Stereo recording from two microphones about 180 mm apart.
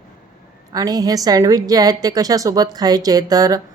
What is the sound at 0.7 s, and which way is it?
Speech, 20° right (ahead or behind).